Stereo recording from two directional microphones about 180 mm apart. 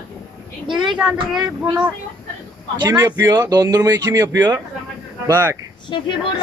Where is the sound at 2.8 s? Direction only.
20° right (ahead or behind).